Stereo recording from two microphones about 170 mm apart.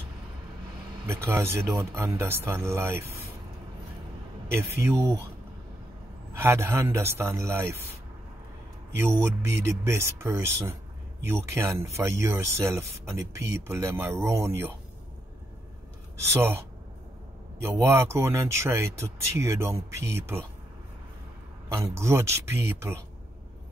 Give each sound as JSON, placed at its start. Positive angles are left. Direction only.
{"t": 1.0, "sound": "speech", "side_deg": -15}
{"t": 4.5, "sound": "speech", "side_deg": -15}
{"t": 6.3, "sound": "speech", "side_deg": -15}
{"t": 8.9, "sound": "speech", "side_deg": -15}
{"t": 16.3, "sound": "speech", "side_deg": -15}
{"t": 17.8, "sound": "speech", "side_deg": -15}
{"t": 21.7, "sound": "speech", "side_deg": -15}